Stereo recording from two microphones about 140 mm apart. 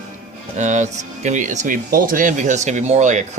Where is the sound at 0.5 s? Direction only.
60° right (ahead or behind).